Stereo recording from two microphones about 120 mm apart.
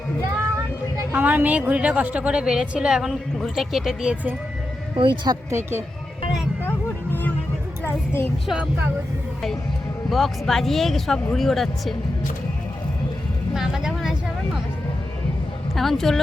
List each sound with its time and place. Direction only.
1.1 s a woman's voice: 15° right (ahead or behind)
4.9 s speech: 40° right (ahead or behind)
5.5 s speech: 20° right (ahead or behind)
6.6 s music: 15° left (ahead or behind)
7.9 s speech: 20° left (ahead or behind)
10.1 s speech: centre (ahead or behind)
13.5 s a sound: 5° right (ahead or behind)
15.7 s speech: centre (ahead or behind)